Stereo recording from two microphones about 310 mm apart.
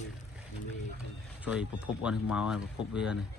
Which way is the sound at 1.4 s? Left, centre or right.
Centre.